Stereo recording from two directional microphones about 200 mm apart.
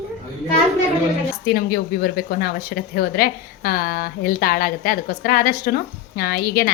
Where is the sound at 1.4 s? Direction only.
45° left (ahead or behind).